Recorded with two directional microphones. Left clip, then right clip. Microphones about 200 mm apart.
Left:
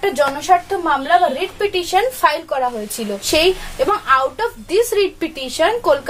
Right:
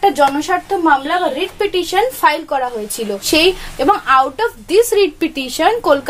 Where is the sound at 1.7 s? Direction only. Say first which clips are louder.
Even; 45° right (ahead or behind).